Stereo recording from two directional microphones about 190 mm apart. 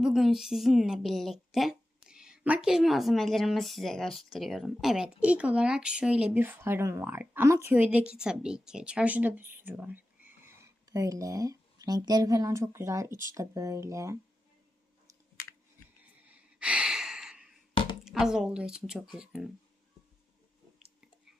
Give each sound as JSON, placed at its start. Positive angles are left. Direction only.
{"t": 0.0, "sound": "a woman's voice", "side_deg": 0}
{"t": 16.0, "sound": "a sound", "side_deg": -5}
{"t": 18.0, "sound": "a woman's voice", "side_deg": 0}